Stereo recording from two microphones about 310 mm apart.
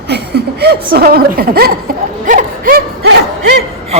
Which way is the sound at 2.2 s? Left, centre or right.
Right.